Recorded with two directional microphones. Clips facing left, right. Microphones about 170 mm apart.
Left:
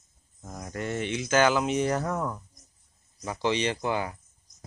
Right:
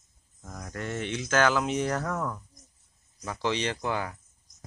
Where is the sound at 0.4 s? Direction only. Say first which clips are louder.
Left 3 dB; 15° left (ahead or behind).